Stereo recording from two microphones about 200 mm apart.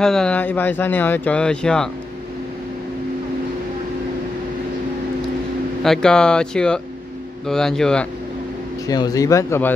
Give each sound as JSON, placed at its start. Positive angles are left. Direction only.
{"t": 0.0, "sound": "speech", "side_deg": 5}
{"t": 5.9, "sound": "speech", "side_deg": 5}
{"t": 8.8, "sound": "speech", "side_deg": 20}